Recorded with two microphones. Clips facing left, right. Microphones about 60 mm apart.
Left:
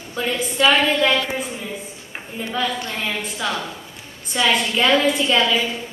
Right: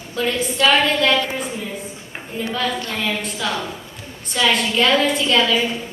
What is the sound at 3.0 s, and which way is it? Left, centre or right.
Speech, centre.